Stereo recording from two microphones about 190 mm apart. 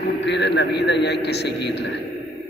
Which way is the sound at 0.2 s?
65° left (ahead or behind).